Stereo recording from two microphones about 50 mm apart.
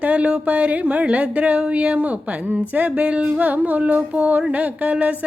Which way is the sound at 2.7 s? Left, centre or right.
Right.